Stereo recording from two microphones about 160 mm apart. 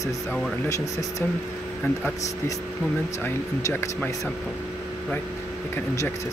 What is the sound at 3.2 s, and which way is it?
Speech, 15° left (ahead or behind).